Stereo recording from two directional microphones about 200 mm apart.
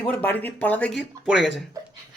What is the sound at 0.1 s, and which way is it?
A man's voice, 10° left (ahead or behind).